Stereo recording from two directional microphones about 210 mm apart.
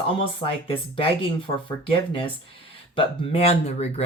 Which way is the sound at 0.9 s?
25° left (ahead or behind).